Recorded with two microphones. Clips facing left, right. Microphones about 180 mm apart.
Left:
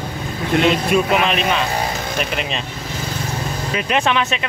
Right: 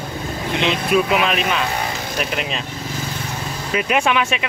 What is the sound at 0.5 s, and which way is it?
Speech, 45° left (ahead or behind).